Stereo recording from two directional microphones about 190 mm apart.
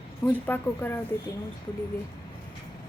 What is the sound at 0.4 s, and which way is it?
Speech, 10° left (ahead or behind).